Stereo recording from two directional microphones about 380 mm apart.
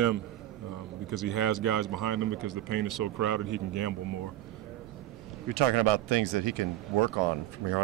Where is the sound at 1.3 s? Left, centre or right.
Right.